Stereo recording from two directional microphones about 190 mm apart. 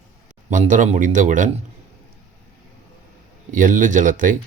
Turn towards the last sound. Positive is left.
turn(degrees=-45)  # may be behind; listen again after turning